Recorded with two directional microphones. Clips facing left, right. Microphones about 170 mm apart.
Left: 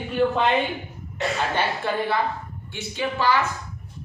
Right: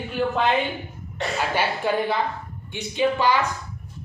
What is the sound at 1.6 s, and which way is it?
A man's voice, 15° right (ahead or behind).